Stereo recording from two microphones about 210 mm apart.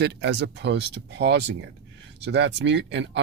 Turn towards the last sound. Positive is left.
turn(degrees=-55)  # may be behind; listen again after turning